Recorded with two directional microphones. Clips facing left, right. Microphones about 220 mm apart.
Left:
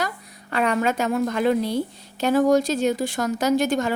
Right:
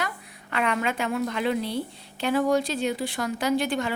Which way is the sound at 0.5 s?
40° left (ahead or behind).